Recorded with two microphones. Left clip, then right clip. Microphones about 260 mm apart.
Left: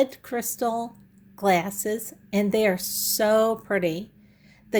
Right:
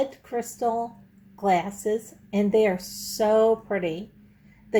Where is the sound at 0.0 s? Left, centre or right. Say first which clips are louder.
Left 3 dB; left.